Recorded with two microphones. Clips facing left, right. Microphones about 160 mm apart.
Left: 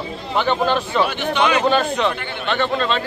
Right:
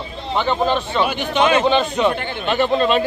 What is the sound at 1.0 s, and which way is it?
A man's voice, 15° right (ahead or behind).